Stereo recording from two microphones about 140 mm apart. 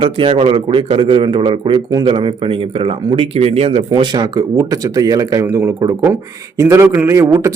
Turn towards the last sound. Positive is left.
turn(degrees=-20)  # may be behind; listen again after turning